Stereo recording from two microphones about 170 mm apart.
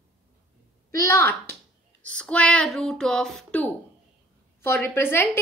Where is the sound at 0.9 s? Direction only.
20° left (ahead or behind).